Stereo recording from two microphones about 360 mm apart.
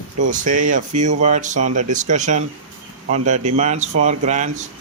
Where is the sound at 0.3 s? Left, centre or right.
Right.